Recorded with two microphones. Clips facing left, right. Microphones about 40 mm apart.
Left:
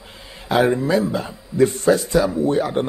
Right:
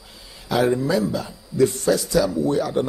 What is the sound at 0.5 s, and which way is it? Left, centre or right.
A man's voice, left.